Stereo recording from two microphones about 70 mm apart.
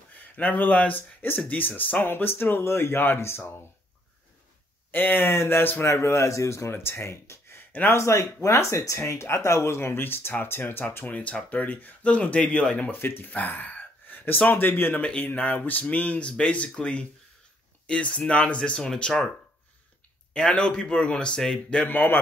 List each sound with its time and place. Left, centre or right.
0.4 s speech: left
4.9 s speech: left
5.9 s speech: left
8.0 s speech: left
11.1 s speech: centre
13.0 s speech: left; by 19.2 s centre
20.3 s speech: centre
21.8 s speech: left